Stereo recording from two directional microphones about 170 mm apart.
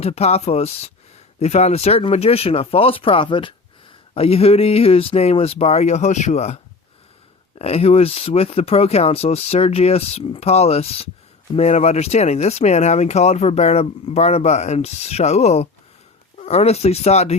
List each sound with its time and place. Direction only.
0.0 s speech: 40° left (ahead or behind)
7.6 s speech: 35° left (ahead or behind)